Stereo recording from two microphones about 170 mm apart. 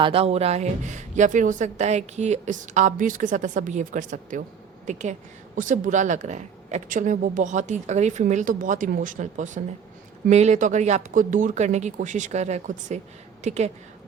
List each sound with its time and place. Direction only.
0.0 s speech: 35° right (ahead or behind)